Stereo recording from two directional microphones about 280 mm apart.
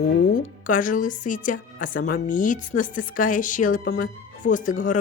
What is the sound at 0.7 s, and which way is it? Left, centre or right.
A woman's voice, left.